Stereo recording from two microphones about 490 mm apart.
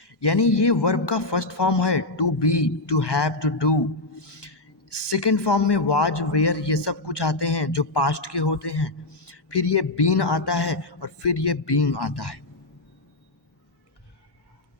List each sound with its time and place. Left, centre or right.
0.0 s a man's voice: left